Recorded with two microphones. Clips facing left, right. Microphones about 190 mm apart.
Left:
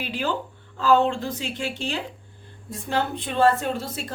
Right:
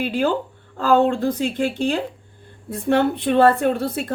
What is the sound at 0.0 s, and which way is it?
Speech, 50° right (ahead or behind).